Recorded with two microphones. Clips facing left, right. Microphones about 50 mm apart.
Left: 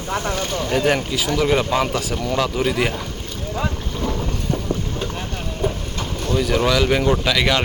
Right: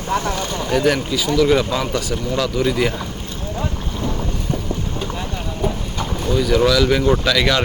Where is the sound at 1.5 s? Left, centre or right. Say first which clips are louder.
Right 1 dB; left.